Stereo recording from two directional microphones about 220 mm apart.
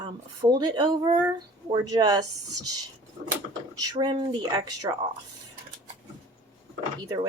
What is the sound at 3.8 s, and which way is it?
Speech, 15° right (ahead or behind).